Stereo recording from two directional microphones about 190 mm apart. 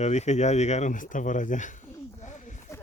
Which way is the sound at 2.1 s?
40° left (ahead or behind).